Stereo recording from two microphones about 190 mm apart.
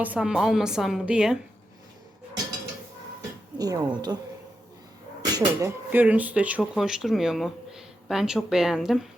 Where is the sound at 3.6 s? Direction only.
20° right (ahead or behind).